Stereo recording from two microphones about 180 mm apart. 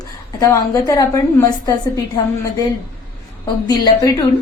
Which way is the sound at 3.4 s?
20° left (ahead or behind).